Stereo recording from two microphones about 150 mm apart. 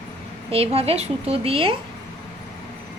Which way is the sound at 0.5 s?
40° right (ahead or behind).